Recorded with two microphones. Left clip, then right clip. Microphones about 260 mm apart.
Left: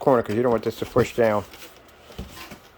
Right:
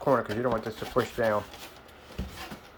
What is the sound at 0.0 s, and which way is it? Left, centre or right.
Speech, left.